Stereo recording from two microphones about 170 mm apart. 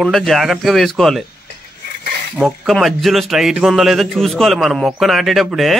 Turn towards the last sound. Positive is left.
turn(degrees=0)  # may be behind; listen again after turning